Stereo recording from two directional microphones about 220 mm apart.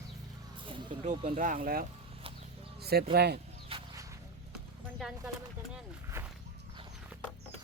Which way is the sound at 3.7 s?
20° right (ahead or behind).